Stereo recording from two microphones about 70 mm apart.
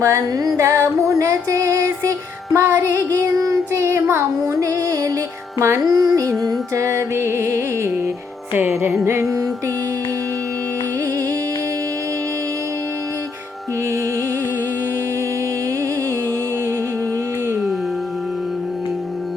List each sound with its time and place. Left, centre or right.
0.0 s music: right
0.6 s music: right
3.4 s child singing: right
4.6 s music: right
5.5 s music: right
5.8 s music: right
6.7 s music: right
8.5 s music: right